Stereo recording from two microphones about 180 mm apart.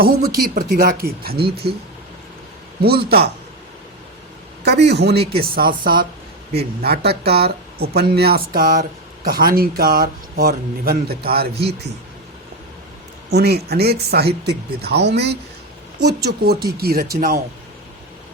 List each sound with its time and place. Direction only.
0.5 s a man's voice: 55° right (ahead or behind)
2.8 s speech: 60° right (ahead or behind)
4.6 s a man's voice: 70° right (ahead or behind)
5.4 s speech: 55° right (ahead or behind)
13.3 s speech: 65° right (ahead or behind)